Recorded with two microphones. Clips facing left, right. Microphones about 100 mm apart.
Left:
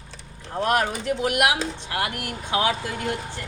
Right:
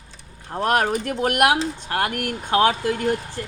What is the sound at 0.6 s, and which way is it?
A woman's voice, 45° right (ahead or behind).